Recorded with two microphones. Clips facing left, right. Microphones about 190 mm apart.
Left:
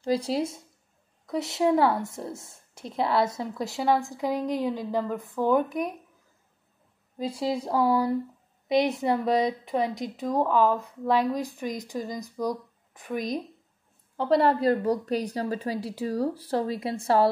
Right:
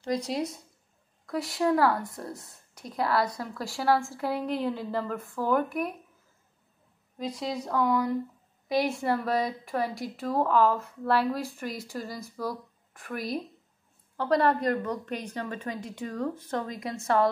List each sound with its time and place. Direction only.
0.0 s a woman's voice: 30° left (ahead or behind)
7.2 s a woman's voice: 30° left (ahead or behind)
8.6 s a woman's voice: 20° left (ahead or behind)